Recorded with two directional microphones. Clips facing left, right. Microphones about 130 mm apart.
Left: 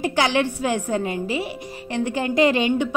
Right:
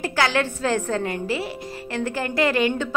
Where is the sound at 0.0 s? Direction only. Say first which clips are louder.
Left 2 dB; 20° left (ahead or behind).